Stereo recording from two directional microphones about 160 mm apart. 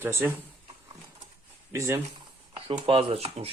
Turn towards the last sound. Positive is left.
turn(degrees=-40)  # may be behind; listen again after turning